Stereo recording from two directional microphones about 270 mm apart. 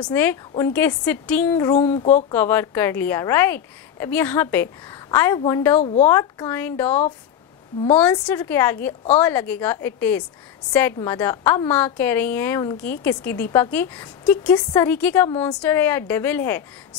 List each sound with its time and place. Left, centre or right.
0.0 s a woman's voice: centre
1.8 s speech: left
2.3 s a woman's voice: centre
5.8 s speech: left
6.0 s a woman's voice: centre
8.0 s a woman's voice: centre